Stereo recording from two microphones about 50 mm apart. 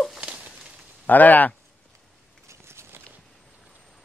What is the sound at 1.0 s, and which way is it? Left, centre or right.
Speech, left.